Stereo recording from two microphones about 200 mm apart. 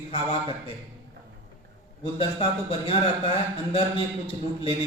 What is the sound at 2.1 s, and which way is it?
A man's voice, 25° left (ahead or behind).